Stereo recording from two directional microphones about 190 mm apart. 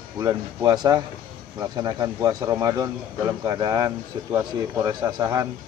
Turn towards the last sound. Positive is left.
turn(degrees=-20)  # may be behind; listen again after turning